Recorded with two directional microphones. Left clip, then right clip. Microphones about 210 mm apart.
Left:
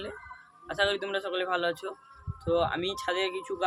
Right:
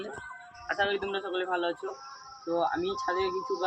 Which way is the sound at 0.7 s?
30° left (ahead or behind).